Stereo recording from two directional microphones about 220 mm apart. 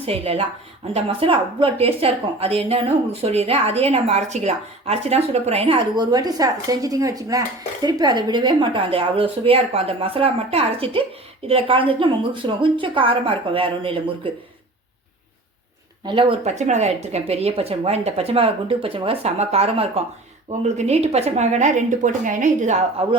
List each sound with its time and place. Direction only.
0.0 s a woman's voice: 25° right (ahead or behind)
16.0 s a woman's voice: 20° right (ahead or behind)